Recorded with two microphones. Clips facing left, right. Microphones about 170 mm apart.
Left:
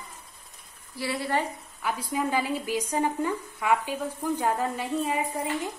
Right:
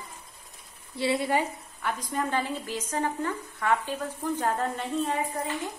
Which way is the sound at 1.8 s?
5° left (ahead or behind).